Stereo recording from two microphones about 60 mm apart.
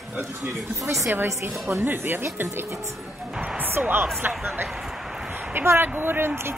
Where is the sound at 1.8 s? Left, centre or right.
Right.